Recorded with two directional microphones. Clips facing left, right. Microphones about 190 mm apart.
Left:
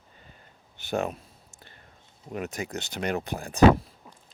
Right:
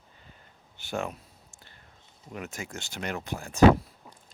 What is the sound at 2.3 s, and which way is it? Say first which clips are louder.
Speech: left 5 dB; 35° left (ahead or behind).